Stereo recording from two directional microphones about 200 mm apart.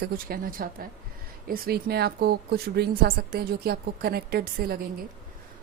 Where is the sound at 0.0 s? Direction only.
45° right (ahead or behind).